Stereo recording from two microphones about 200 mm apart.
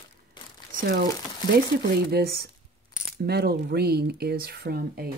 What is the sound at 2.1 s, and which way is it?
Speech, 50° right (ahead or behind).